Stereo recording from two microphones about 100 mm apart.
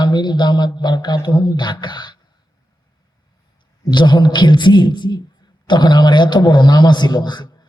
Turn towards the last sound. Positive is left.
turn(degrees=45)  # may be behind; listen again after turning